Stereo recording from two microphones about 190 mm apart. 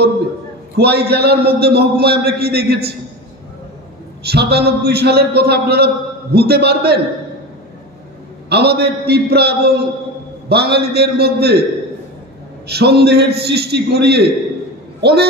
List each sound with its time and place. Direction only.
0.7 s a man's voice: 60° right (ahead or behind)
4.3 s a man's voice: 60° right (ahead or behind)
8.5 s a man's voice: 60° right (ahead or behind)
12.6 s a man's voice: 60° right (ahead or behind)